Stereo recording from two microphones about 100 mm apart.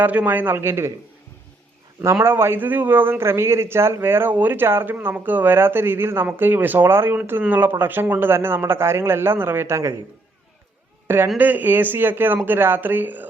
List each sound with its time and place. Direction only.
0.0 s a man's voice: 15° right (ahead or behind)
2.2 s a man's voice: 25° right (ahead or behind)
11.3 s a man's voice: 20° right (ahead or behind)